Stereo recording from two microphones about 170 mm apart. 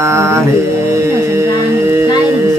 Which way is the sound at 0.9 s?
15° right (ahead or behind).